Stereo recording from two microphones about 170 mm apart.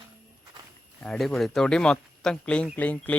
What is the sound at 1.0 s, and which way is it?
Speech, 5° left (ahead or behind).